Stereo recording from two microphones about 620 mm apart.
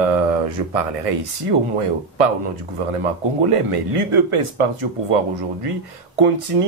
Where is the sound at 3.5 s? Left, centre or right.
Right.